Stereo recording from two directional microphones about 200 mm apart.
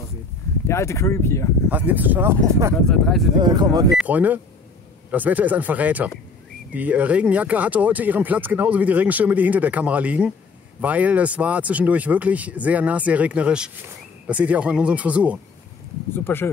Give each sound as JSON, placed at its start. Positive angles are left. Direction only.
{"t": 0.7, "sound": "speech", "side_deg": 15}
{"t": 1.7, "sound": "speech", "side_deg": -10}
{"t": 2.7, "sound": "speech", "side_deg": 0}
{"t": 3.3, "sound": "speech", "side_deg": -20}
{"t": 4.0, "sound": "speech", "side_deg": -10}
{"t": 16.3, "sound": "speech", "side_deg": 10}